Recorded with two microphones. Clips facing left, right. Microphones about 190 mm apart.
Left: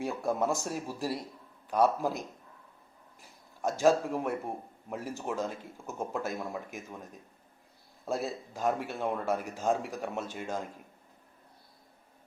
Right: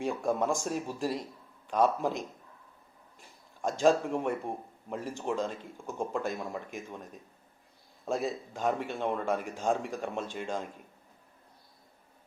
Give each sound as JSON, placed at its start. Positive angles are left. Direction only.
{"t": 0.0, "sound": "speech", "side_deg": 5}
{"t": 3.2, "sound": "speech", "side_deg": 5}
{"t": 8.0, "sound": "speech", "side_deg": 0}